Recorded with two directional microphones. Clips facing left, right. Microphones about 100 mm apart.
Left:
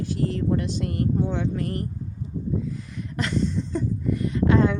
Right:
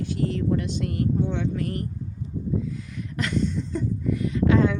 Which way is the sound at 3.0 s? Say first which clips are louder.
Even; 30° left (ahead or behind).